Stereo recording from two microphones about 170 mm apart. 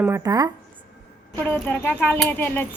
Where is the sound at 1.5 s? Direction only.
10° left (ahead or behind).